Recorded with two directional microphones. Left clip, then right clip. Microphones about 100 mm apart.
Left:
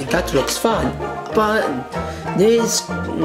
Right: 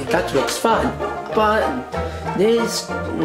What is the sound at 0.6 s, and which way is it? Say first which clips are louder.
Speech: right 2 dB; 20° left (ahead or behind).